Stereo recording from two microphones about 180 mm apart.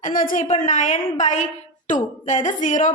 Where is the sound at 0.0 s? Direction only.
50° left (ahead or behind).